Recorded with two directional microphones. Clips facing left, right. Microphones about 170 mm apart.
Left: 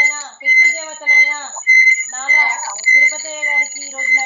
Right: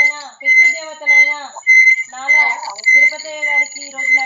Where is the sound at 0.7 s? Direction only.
10° right (ahead or behind).